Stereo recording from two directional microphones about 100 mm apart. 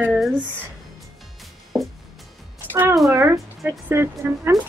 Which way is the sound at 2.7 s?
20° right (ahead or behind).